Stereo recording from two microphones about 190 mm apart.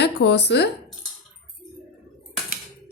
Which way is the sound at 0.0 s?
65° left (ahead or behind).